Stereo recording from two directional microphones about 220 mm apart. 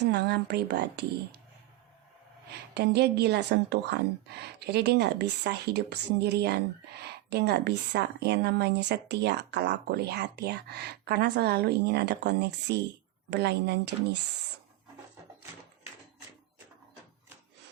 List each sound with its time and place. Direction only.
0.0 s speech: 50° right (ahead or behind)
2.7 s speech: 50° right (ahead or behind)